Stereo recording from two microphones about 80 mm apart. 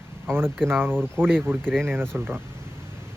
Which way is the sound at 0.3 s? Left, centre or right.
Right.